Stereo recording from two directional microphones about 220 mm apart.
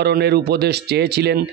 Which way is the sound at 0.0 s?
45° right (ahead or behind).